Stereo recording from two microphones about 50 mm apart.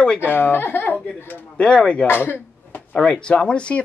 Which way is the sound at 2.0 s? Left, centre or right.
Left.